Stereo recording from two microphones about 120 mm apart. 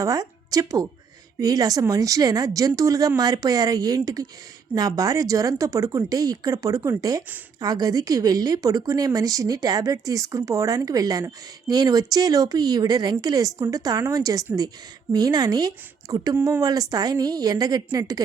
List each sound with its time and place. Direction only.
0.0 s a woman's voice: 30° right (ahead or behind)
16.3 s speech: 20° right (ahead or behind)
16.6 s a woman's voice: 30° right (ahead or behind)